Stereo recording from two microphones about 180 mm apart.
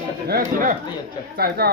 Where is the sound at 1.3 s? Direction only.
60° right (ahead or behind).